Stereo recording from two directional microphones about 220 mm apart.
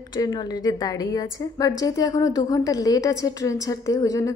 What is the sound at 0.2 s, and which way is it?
A woman's voice, 15° left (ahead or behind).